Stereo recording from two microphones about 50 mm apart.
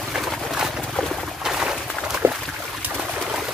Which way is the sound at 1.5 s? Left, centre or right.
Centre.